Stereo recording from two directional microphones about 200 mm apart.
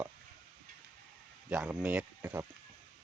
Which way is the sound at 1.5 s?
5° right (ahead or behind).